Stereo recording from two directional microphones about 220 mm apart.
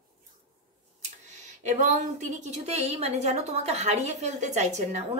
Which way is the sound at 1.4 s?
35° right (ahead or behind).